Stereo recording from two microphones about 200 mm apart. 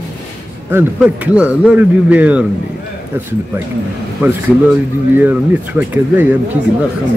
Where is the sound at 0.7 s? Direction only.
5° right (ahead or behind).